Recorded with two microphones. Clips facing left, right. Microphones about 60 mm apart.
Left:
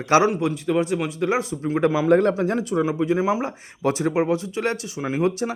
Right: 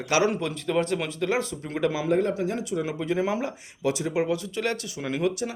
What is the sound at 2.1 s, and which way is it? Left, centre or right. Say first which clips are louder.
Speech: left 7 dB; left.